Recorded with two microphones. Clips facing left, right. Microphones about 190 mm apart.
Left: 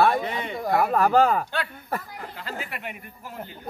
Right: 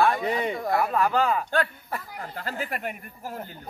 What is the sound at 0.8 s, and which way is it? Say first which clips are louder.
Speech: left 6 dB; 45° left (ahead or behind).